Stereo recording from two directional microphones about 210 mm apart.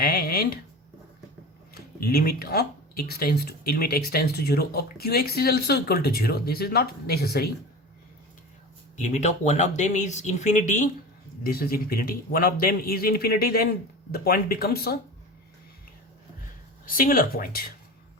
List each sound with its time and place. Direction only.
0.0 s a sound: 45° left (ahead or behind)
1.7 s speech: 45° left (ahead or behind)
9.0 s speech: 35° left (ahead or behind)
16.8 s speech: 40° left (ahead or behind)